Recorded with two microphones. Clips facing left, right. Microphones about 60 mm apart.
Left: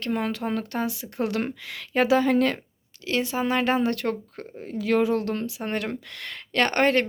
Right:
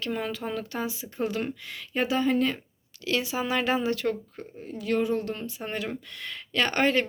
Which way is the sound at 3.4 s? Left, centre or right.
Left.